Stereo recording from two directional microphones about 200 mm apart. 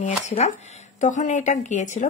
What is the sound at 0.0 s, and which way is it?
Speech, 35° left (ahead or behind).